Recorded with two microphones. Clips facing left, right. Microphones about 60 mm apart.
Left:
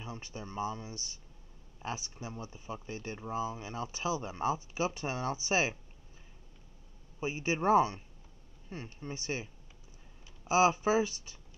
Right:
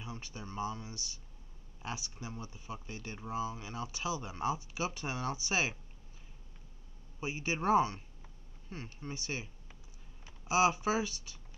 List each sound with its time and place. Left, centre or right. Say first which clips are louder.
0.0 s a sound: left 1 dB; left
0.4 s speech: left 2 dB; left
7.2 s speech: left 3 dB; left